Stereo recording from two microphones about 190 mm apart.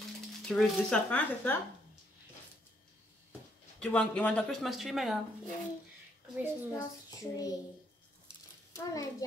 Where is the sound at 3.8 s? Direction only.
5° left (ahead or behind).